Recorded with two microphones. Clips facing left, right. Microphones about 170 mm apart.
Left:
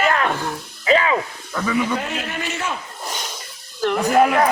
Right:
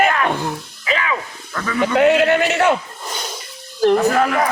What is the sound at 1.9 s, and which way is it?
Speech, 75° right (ahead or behind).